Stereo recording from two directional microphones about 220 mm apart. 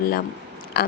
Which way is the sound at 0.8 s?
45° left (ahead or behind).